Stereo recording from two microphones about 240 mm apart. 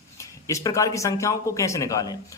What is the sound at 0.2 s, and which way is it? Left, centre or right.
Speech, centre.